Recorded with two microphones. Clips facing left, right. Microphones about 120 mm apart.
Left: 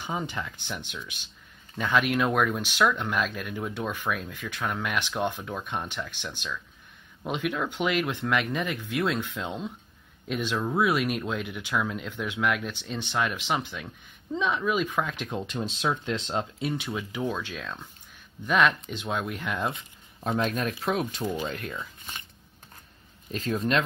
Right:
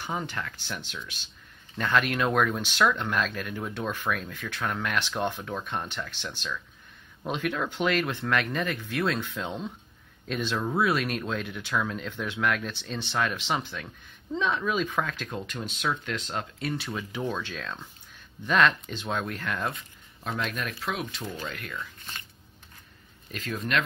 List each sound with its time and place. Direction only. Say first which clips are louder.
0.0 s speech: left 1 dB; 15° left (ahead or behind)
16.9 s speech: left 1 dB; 5° left (ahead or behind)
20.2 s speech: left 5 dB; 40° left (ahead or behind)
21.2 s speech: left 6 dB; 15° left (ahead or behind)
21.5 s speech: left 4 dB; 40° left (ahead or behind)
21.7 s speech: even; 15° left (ahead or behind)
23.3 s speech: left 4 dB; 40° left (ahead or behind)